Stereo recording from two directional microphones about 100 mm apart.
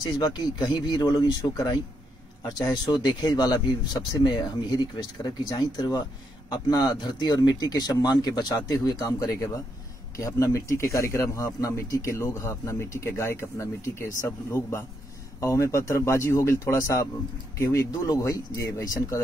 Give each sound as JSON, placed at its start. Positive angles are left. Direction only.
{"t": 0.2, "sound": "speech", "side_deg": 45}
{"t": 2.9, "sound": "speech", "side_deg": 45}